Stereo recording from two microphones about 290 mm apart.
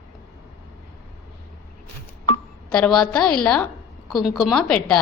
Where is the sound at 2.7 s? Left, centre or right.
Centre.